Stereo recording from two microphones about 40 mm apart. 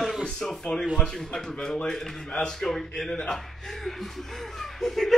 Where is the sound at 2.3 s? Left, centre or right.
Left.